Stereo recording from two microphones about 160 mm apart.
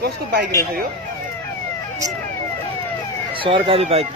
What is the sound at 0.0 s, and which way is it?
Speech, 80° right.